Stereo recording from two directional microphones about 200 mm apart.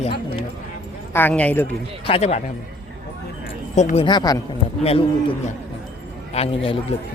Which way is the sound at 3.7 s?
35° left (ahead or behind).